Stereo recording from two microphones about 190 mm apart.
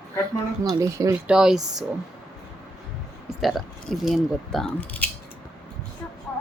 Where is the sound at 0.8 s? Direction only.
15° right (ahead or behind).